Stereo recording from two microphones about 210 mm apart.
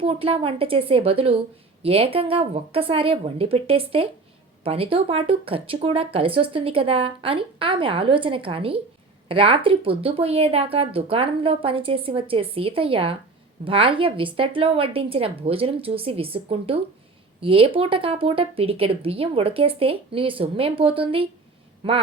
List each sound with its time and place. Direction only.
0.0 s speech: 25° right (ahead or behind)